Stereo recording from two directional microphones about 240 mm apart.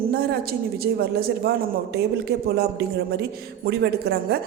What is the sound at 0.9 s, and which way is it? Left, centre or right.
Speech, right.